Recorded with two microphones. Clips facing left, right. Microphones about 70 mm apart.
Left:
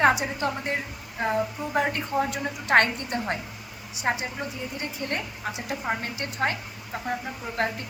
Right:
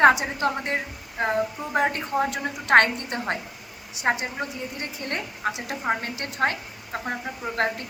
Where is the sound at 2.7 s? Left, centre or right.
Right.